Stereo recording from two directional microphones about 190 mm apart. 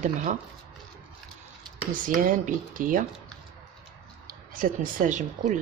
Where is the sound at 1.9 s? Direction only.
45° right (ahead or behind).